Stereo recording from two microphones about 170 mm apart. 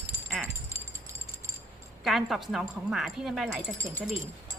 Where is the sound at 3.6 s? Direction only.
20° right (ahead or behind).